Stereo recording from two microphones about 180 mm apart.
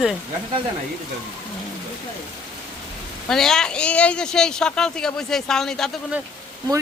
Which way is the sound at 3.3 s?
Centre (ahead or behind).